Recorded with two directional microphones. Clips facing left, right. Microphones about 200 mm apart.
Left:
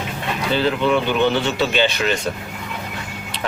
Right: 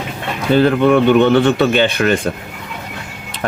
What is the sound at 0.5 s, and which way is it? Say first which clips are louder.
Speech: right 7 dB; 55° right (ahead or behind).